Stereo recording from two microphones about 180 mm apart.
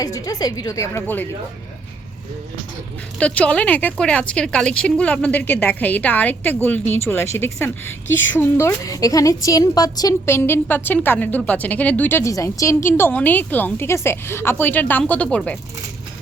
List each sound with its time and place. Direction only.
0.0 s a woman's voice: 20° left (ahead or behind)
3.2 s a woman's voice: 5° left (ahead or behind)